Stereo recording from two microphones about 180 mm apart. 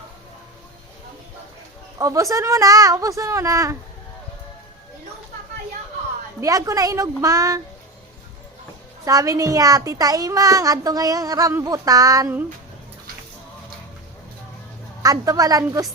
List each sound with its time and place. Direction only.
2.0 s a woman's voice: 20° right (ahead or behind)
6.4 s a child's voice: 20° right (ahead or behind)
9.0 s a child's voice: 20° right (ahead or behind)
15.0 s a child's voice: 20° right (ahead or behind)